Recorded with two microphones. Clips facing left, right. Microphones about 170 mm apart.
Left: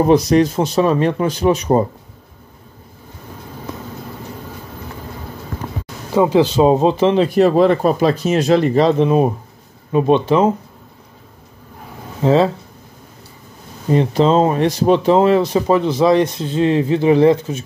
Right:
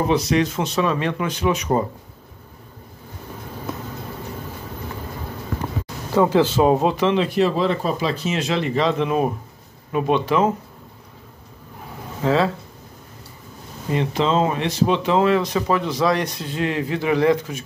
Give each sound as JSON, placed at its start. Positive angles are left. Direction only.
{"t": 0.0, "sound": "speech", "side_deg": 40}
{"t": 6.1, "sound": "speech", "side_deg": 15}
{"t": 12.2, "sound": "speech", "side_deg": 30}
{"t": 13.8, "sound": "speech", "side_deg": 35}